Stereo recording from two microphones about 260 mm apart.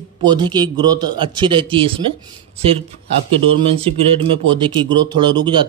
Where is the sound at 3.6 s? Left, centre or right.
Right.